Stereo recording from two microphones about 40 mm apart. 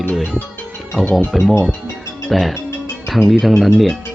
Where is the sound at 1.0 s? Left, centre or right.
Right.